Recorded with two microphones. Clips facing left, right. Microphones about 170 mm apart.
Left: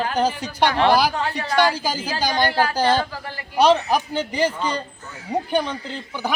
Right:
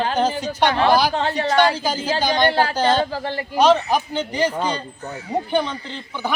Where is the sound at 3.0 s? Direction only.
30° right (ahead or behind).